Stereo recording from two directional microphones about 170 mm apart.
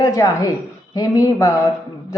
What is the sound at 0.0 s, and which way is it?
A man's voice, 20° left (ahead or behind).